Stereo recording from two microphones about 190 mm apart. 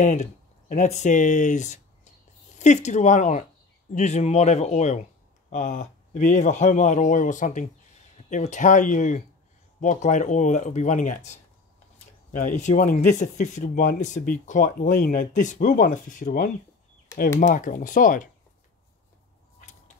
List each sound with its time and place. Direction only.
0.0 s a man's voice: 40° left (ahead or behind)
12.4 s speech: 40° left (ahead or behind)